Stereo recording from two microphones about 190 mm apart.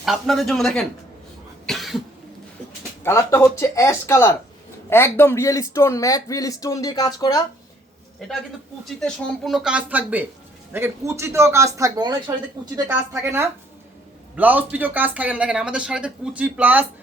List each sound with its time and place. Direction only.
0.0 s speech: centre (ahead or behind)
1.6 s cough: centre (ahead or behind)
3.0 s speech: 15° left (ahead or behind)
8.8 s speech: centre (ahead or behind)